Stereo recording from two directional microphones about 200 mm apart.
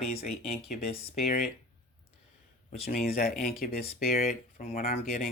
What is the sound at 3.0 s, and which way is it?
Speech, 50° left (ahead or behind).